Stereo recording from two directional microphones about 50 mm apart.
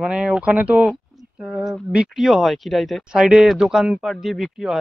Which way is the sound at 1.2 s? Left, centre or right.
Centre.